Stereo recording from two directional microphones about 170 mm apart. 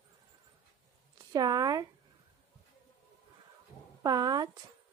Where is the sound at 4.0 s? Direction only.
20° right (ahead or behind).